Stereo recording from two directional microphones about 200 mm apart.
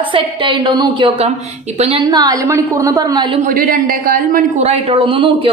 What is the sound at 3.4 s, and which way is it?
A man's voice, 45° right (ahead or behind).